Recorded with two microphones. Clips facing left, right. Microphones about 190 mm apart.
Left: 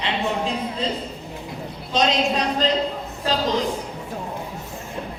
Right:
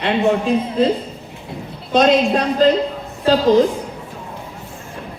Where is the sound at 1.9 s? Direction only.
55° right (ahead or behind).